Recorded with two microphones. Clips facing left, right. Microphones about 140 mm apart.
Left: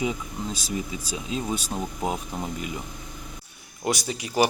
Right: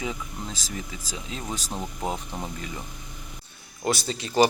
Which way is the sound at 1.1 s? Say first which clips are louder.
Left 5 dB; 20° left (ahead or behind).